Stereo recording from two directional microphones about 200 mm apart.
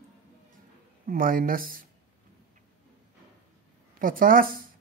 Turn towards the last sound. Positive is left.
turn(degrees=-45)  # may be behind; listen again after turning